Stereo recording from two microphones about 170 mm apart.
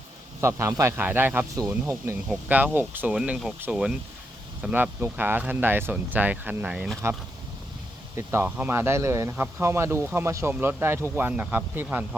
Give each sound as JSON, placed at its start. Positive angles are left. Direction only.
{"t": 0.4, "sound": "speech", "side_deg": -15}
{"t": 2.3, "sound": "speech", "side_deg": -5}
{"t": 8.1, "sound": "speech", "side_deg": -15}